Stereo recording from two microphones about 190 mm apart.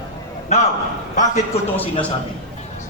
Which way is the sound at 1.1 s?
40° left (ahead or behind).